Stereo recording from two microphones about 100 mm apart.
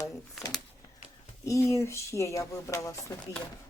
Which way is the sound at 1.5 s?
30° left (ahead or behind).